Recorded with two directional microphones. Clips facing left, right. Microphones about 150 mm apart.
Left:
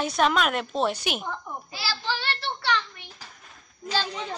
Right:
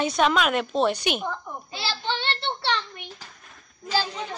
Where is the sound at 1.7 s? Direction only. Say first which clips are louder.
Right 2 dB; 25° right (ahead or behind).